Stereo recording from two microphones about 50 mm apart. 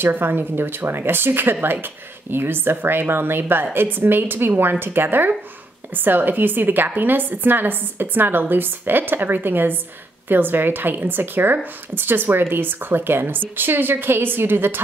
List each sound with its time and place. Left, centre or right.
0.0 s a woman's voice: right